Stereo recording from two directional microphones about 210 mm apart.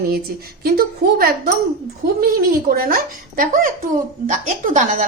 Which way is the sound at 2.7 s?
45° right (ahead or behind).